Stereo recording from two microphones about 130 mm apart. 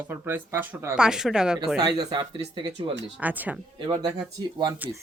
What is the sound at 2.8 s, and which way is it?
Speech, 40° right (ahead or behind).